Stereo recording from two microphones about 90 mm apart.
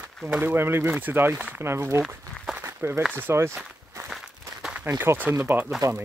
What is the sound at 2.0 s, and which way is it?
Walk, centre (ahead or behind).